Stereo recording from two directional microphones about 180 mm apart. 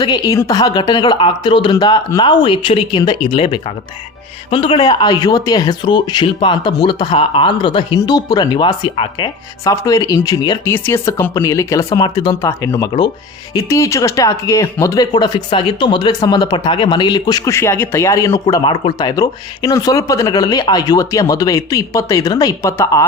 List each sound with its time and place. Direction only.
0.0 s speech: 20° left (ahead or behind)
10.6 s speech: 15° left (ahead or behind)